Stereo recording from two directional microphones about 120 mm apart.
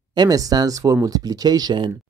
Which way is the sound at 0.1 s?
35° right (ahead or behind).